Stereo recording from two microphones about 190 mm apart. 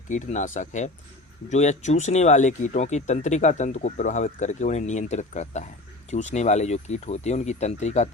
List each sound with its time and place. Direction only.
0.1 s speech: 40° left (ahead or behind)